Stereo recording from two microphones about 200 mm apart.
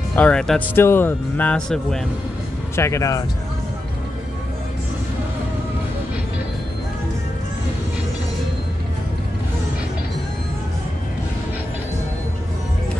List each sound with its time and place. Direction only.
0.1 s speech: 5° left (ahead or behind)
2.7 s speech: 15° left (ahead or behind)